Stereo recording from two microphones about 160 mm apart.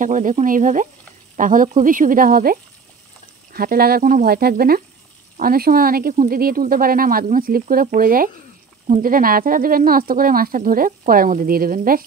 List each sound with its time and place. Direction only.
0.0 s speech: 55° right (ahead or behind)